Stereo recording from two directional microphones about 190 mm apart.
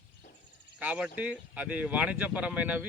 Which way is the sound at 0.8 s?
5° right (ahead or behind).